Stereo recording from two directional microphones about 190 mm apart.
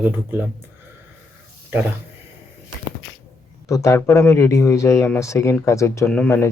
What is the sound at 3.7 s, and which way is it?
Speech, 15° left (ahead or behind).